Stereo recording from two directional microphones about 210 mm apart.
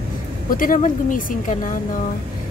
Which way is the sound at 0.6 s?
40° left (ahead or behind).